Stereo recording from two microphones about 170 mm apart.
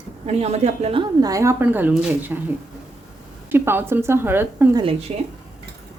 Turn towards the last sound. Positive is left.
turn(degrees=-40)  # may be behind; listen again after turning